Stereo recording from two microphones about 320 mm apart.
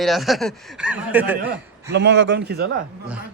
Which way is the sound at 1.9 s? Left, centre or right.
Right.